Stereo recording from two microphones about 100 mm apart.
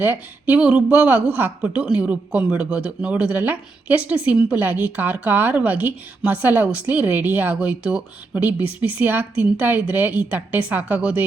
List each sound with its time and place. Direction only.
0.0 s a woman's voice: 20° right (ahead or behind)